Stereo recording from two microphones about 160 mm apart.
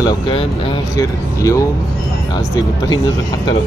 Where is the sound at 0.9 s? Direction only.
20° left (ahead or behind).